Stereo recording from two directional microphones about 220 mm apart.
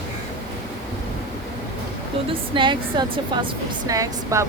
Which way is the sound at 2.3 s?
20° right (ahead or behind).